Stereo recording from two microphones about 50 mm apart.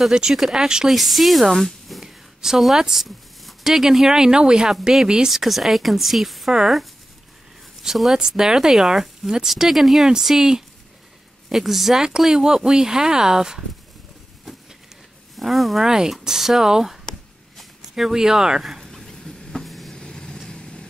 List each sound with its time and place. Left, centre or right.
0.1 s a woman's voice: centre
7.8 s speech: centre
15.3 s speech: centre
15.9 s speech: centre
18.8 s a sound: centre
20.0 s vehicle: centre